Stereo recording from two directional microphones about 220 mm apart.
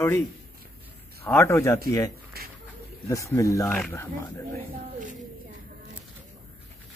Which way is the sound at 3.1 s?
15° left (ahead or behind).